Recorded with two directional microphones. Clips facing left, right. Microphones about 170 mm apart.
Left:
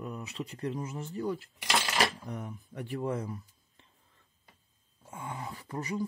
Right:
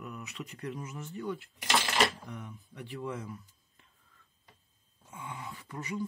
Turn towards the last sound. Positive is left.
turn(degrees=35)  # may be behind; listen again after turning